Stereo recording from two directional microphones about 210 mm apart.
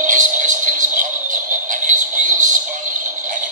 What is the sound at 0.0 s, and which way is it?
Music, 35° right (ahead or behind).